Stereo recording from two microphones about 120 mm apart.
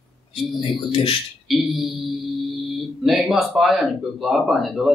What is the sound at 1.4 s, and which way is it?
Speech, centre (ahead or behind).